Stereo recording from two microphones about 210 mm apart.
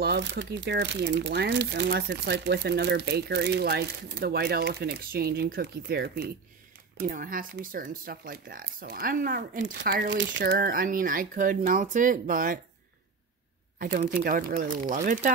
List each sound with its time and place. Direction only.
0.0 s speech: 55° right (ahead or behind)
10.0 s speech: 60° right (ahead or behind); by 12.5 s 40° right (ahead or behind)
13.7 s speech: 45° right (ahead or behind)